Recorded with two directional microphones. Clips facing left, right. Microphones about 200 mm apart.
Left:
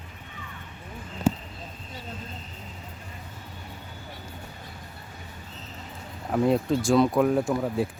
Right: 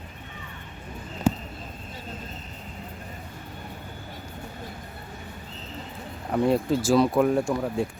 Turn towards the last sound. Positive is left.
turn(degrees=5)  # may be behind; listen again after turning